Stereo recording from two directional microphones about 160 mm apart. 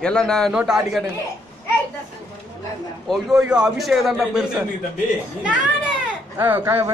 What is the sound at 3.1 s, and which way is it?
A man's voice, 5° right (ahead or behind).